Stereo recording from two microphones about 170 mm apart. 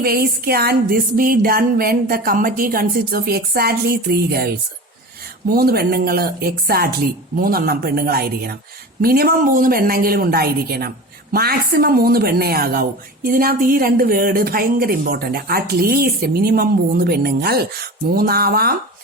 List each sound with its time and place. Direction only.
0.0 s a woman's voice: 65° right (ahead or behind)